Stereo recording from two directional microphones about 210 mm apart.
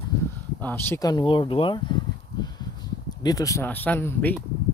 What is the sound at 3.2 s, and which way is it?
Speech, 15° left (ahead or behind).